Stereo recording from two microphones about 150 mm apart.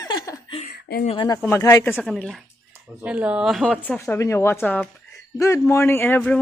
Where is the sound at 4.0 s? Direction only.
20° left (ahead or behind).